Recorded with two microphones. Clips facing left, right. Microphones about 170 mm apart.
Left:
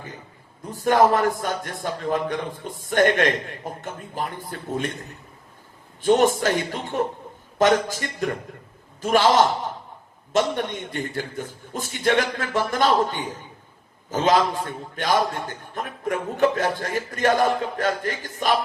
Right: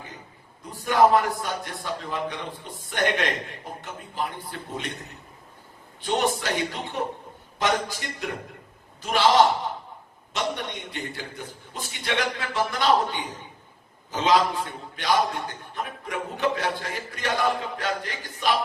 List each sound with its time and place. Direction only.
0.7 s a man's voice: 45° left (ahead or behind)
6.0 s a man's voice: 45° left (ahead or behind)